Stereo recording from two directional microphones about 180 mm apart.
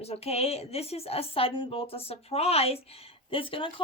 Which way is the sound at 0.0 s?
35° left (ahead or behind).